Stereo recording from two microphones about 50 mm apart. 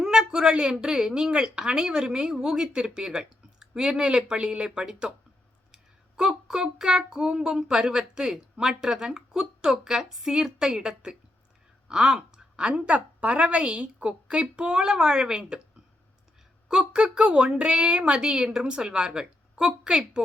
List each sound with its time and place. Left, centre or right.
0.0 s a woman's voice: centre
5.7 s child singing: centre
8.6 s a woman's voice: centre
16.6 s a woman's voice: centre